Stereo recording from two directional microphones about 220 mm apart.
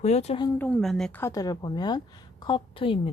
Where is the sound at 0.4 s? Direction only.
5° left (ahead or behind).